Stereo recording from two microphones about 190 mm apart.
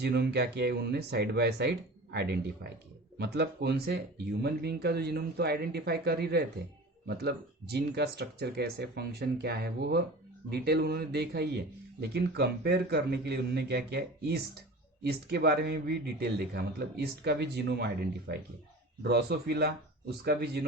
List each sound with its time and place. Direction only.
0.0 s a man's voice: 60° right (ahead or behind)